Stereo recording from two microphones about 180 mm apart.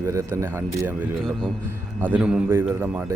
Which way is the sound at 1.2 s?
5° left (ahead or behind).